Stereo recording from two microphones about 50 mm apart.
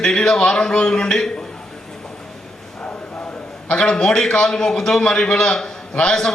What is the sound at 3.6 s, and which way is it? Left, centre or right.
A man's voice, centre.